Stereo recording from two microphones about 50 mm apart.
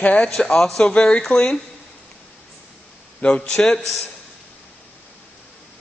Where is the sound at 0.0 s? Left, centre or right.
Left.